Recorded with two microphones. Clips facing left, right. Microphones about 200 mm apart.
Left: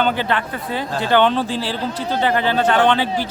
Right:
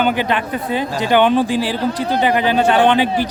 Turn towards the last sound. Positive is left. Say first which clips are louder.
# right 3 dB
turn(degrees=-15)  # may be behind; listen again after turning